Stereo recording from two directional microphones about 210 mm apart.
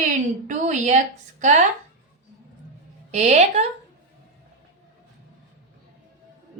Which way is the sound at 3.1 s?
35° right (ahead or behind).